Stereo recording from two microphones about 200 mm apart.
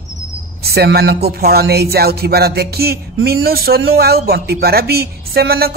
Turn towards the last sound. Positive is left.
turn(degrees=-50)  # may be behind; listen again after turning